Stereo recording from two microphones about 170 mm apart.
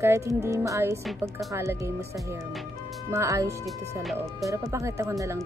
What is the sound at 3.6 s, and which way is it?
Speech, centre (ahead or behind).